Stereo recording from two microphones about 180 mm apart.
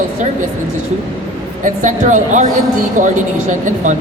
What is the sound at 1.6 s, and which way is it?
Speech, 45° right (ahead or behind).